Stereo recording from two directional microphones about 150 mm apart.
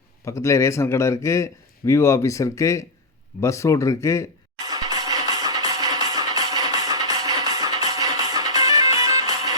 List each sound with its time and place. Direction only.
0.3 s a man's voice: 20° left (ahead or behind)
4.6 s music: 25° right (ahead or behind)